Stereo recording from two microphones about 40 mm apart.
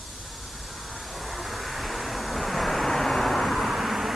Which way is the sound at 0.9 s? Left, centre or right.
Centre.